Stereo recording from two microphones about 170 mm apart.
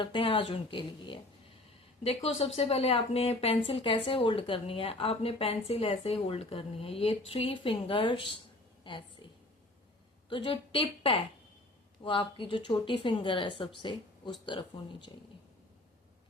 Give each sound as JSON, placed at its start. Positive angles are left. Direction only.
{"t": 0.0, "sound": "a woman's voice", "side_deg": 30}
{"t": 8.8, "sound": "a sound", "side_deg": 30}
{"t": 10.2, "sound": "a woman's voice", "side_deg": 30}